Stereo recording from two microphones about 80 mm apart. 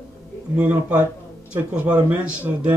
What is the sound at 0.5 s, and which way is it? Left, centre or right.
Speech, centre.